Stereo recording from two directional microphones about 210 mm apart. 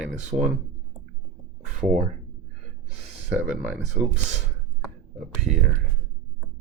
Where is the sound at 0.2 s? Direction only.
35° right (ahead or behind).